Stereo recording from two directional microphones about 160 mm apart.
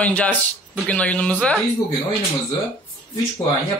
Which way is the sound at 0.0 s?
10° left (ahead or behind).